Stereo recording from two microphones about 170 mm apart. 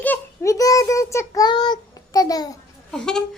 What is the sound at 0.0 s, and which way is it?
Child singing, 15° left (ahead or behind).